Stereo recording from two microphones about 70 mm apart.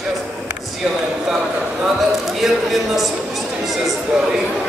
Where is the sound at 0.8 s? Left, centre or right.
Centre.